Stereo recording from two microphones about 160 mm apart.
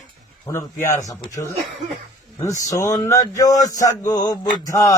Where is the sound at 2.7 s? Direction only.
20° left (ahead or behind).